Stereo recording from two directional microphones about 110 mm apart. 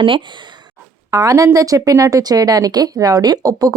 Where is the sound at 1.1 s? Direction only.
30° right (ahead or behind).